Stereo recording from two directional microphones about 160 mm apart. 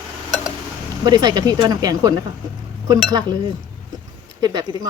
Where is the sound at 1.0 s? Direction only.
25° right (ahead or behind).